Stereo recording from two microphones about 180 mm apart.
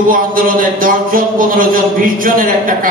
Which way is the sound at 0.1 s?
50° right (ahead or behind).